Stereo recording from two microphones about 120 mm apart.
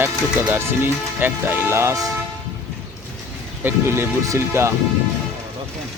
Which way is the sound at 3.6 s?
20° right (ahead or behind).